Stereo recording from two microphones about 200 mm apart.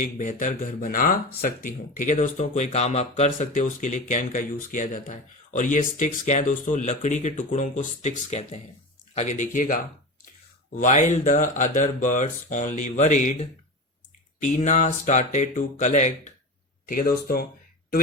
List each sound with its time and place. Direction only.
0.0 s speech: 40° left (ahead or behind)